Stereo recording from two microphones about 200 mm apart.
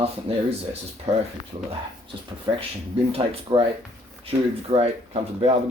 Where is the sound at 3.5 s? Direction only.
20° right (ahead or behind).